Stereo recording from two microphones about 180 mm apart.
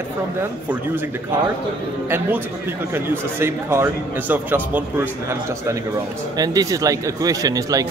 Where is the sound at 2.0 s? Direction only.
10° right (ahead or behind).